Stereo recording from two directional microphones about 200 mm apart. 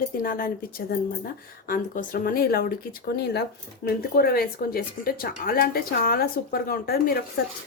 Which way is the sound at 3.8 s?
50° left (ahead or behind).